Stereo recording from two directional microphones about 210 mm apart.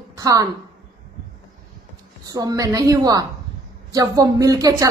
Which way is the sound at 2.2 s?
15° right (ahead or behind).